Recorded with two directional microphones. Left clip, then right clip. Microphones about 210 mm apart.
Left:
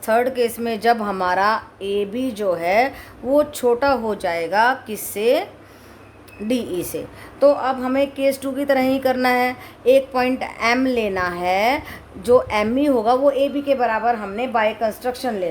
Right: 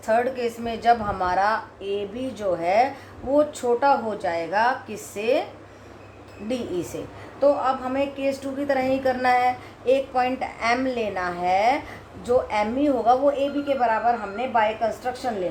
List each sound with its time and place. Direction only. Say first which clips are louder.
0.0 s a woman's voice: left 4 dB; 55° left (ahead or behind)
6.9 s a woman's voice: left 6 dB; 55° left (ahead or behind)